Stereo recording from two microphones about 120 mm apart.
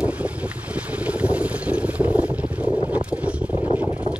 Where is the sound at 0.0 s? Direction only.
10° right (ahead or behind).